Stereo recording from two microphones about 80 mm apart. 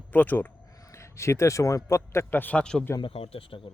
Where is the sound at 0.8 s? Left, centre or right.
Left.